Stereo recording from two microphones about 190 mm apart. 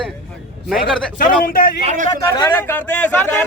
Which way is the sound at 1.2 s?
45° left (ahead or behind).